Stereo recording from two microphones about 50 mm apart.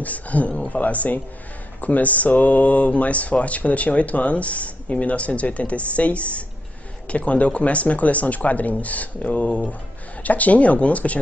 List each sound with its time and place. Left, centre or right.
0.0 s speech: left